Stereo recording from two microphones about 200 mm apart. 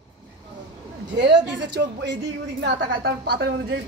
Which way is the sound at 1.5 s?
60° right (ahead or behind).